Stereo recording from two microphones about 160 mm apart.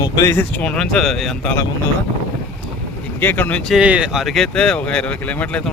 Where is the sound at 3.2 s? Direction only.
10° left (ahead or behind).